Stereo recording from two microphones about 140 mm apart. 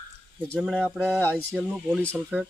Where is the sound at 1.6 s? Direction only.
10° right (ahead or behind).